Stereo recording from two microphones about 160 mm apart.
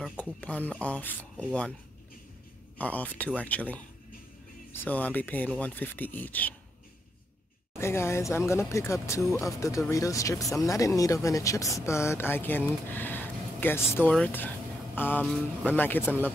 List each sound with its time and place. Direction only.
0.2 s speech: 10° left (ahead or behind)
2.8 s speech: 10° left (ahead or behind)
7.7 s speech: 15° left (ahead or behind)